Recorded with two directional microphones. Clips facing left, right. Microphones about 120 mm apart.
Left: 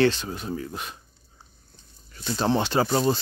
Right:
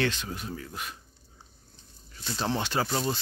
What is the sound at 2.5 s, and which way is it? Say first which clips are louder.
Speech: left 6 dB; 30° left (ahead or behind).